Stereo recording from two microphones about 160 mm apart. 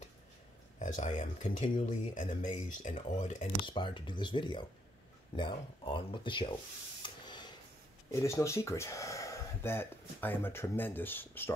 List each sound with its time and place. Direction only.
0.7 s speech: 50° left (ahead or behind)
3.6 s speech: 30° left (ahead or behind)
7.0 s spray: 30° left (ahead or behind)
8.1 s speech: 20° left (ahead or behind)